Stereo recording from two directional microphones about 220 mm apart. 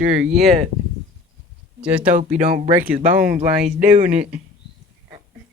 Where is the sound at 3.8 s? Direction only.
35° right (ahead or behind).